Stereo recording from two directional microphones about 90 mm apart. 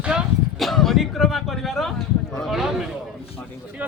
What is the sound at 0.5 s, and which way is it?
Speech, centre (ahead or behind).